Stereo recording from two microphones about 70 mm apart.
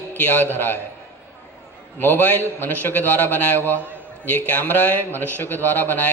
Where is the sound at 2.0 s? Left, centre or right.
Left.